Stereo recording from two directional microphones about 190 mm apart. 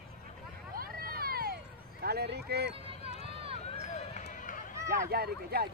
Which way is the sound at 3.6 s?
35° left (ahead or behind).